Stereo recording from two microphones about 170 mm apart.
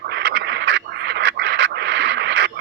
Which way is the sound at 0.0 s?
85° right.